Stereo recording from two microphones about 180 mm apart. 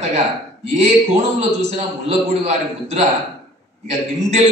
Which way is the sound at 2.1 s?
35° right (ahead or behind).